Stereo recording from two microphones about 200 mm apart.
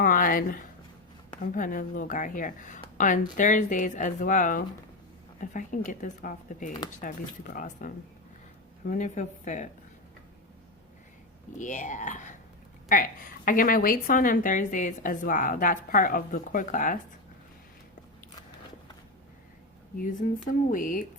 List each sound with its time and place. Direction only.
0.0 s a woman's voice: 45° left (ahead or behind)
11.5 s a woman's voice: 40° left (ahead or behind)
20.0 s a woman's voice: 40° left (ahead or behind)